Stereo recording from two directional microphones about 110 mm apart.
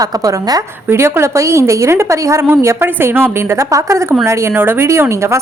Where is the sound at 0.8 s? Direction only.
20° right (ahead or behind).